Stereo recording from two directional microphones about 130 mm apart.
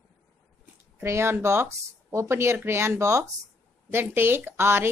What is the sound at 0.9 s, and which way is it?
Speech, 20° right (ahead or behind).